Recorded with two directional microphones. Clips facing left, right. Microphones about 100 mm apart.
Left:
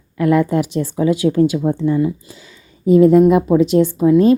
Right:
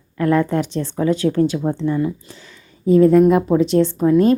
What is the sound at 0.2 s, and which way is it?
A woman's voice, 15° left (ahead or behind).